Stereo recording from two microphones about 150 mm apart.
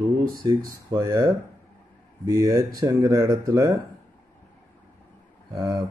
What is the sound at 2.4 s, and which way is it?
Speech, 20° right (ahead or behind).